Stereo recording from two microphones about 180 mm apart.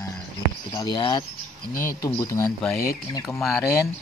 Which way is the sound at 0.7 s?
25° left (ahead or behind).